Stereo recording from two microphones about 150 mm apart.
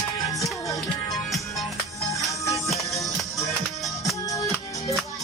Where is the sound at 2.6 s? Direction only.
Centre (ahead or behind).